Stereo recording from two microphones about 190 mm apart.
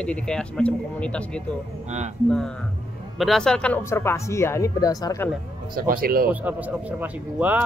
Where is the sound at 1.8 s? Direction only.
35° right (ahead or behind).